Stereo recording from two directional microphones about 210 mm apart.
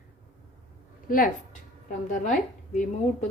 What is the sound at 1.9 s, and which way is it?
Speech, 35° left (ahead or behind).